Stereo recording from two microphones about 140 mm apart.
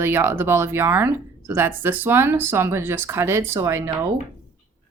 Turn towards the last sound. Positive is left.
turn(degrees=-20)  # may be behind; listen again after turning